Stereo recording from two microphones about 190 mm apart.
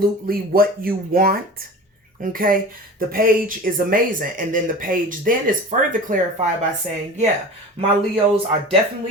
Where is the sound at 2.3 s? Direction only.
45° right (ahead or behind).